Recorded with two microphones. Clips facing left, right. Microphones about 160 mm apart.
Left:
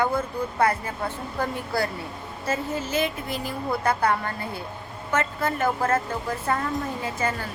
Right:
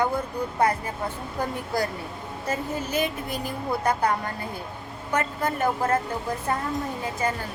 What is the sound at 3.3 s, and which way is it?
Speech, 45° right (ahead or behind).